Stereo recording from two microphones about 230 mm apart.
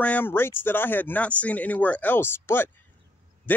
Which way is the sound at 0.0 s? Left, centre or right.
Centre.